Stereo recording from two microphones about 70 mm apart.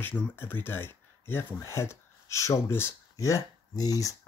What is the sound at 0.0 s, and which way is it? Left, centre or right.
Speech, left.